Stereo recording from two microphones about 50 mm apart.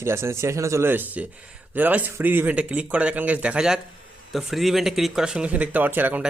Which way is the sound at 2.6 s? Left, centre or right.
Right.